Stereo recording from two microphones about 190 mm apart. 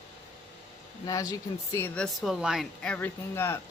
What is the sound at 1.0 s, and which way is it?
Speech, 20° left (ahead or behind).